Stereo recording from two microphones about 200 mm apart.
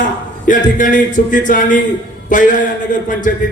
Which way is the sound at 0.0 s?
40° left (ahead or behind).